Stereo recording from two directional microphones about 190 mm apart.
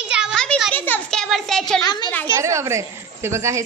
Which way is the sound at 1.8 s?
20° left (ahead or behind).